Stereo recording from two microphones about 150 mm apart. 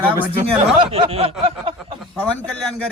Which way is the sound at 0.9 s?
40° right (ahead or behind).